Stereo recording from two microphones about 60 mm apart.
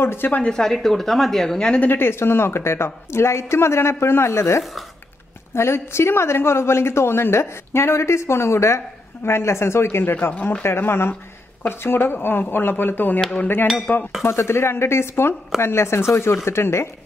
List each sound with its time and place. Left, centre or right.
0.0 s speech: left
0.5 s a woman's voice: centre
1.8 s a woman's voice: left
13.9 s dishes: left
14.2 s a woman's voice: left